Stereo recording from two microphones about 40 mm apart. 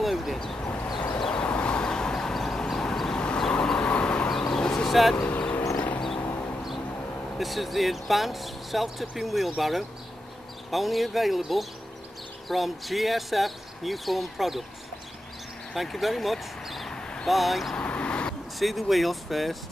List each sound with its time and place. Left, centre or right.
0.0 s a sound: centre
1.3 s a sound: left; by 2.6 s centre
2.7 s vehicle: centre
4.3 s a sound: centre
5.1 s vehicle: left
5.5 s a sound: left
7.3 s speech: centre
15.7 s speech: centre
16.9 s vehicle: centre
17.3 s speech: centre
17.7 s vehicle: left
18.6 s speech: centre